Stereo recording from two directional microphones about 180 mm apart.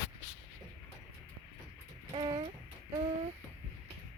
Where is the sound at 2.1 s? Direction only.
25° right (ahead or behind).